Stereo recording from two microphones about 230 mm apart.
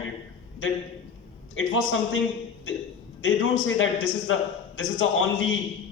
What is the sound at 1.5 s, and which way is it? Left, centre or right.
A man's voice, left.